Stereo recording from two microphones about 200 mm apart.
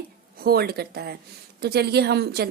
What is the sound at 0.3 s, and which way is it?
A woman's voice, 50° right (ahead or behind).